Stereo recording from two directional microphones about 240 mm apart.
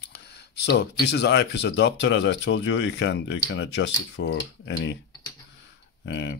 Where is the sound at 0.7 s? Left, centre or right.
Left.